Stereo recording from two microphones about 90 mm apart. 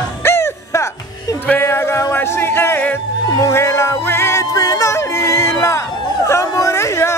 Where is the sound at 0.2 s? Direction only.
30° left (ahead or behind).